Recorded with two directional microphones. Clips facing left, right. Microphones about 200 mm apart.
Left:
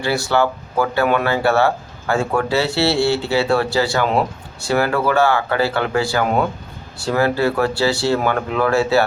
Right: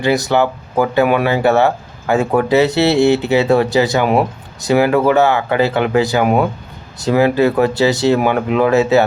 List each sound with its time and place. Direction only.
0.0 s speech: 20° right (ahead or behind)